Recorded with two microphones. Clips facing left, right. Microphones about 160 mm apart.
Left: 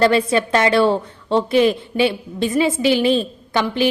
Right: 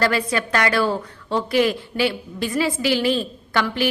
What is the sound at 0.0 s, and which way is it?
A woman's voice, 25° left (ahead or behind).